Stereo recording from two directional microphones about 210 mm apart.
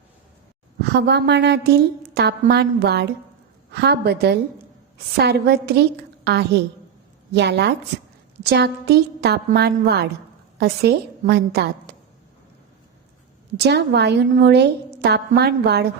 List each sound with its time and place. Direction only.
0.8 s a woman's voice: 55° right (ahead or behind)
13.6 s a woman's voice: 50° right (ahead or behind)